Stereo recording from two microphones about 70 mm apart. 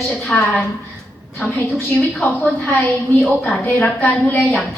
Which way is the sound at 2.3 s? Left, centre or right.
Left.